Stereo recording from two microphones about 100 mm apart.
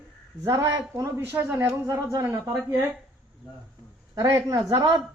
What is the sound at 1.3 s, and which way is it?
Speech, 20° right (ahead or behind).